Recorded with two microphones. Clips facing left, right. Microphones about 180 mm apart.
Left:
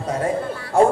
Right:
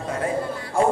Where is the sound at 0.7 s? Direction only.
75° left (ahead or behind).